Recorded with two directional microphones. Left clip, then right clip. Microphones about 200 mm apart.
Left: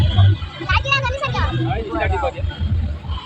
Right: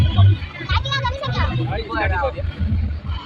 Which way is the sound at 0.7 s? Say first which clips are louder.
Left 4 dB; 50° left (ahead or behind).